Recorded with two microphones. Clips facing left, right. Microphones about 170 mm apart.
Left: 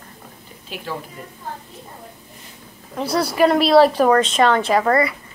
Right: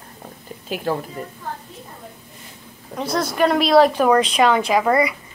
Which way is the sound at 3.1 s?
5° left (ahead or behind).